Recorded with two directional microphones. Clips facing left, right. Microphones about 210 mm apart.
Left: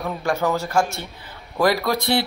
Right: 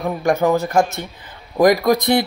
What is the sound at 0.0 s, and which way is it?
A man's voice, 15° right (ahead or behind).